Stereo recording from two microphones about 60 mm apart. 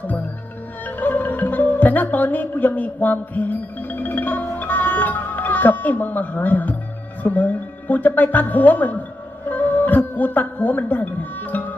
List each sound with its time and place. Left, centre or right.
0.9 s music: left
7.2 s speech: left
9.5 s music: left
10.2 s speech: left